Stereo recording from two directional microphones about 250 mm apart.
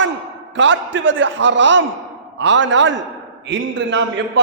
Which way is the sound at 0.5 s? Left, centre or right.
Right.